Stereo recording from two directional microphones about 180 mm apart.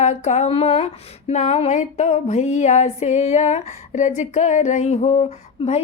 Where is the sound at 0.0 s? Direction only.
40° left (ahead or behind).